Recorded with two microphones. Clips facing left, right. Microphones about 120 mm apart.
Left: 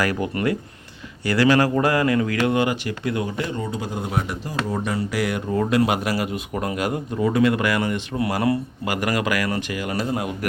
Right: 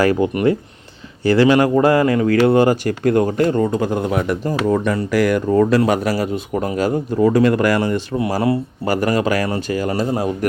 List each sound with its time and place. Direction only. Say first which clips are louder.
0.0 s speech: right 7 dB; 25° right (ahead or behind)